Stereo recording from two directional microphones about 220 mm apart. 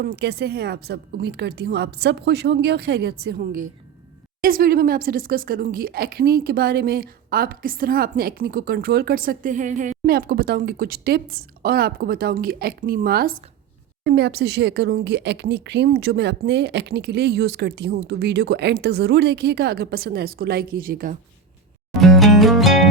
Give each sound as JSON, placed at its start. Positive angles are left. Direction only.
{"t": 0.0, "sound": "speech", "side_deg": -45}
{"t": 22.0, "sound": "music", "side_deg": 0}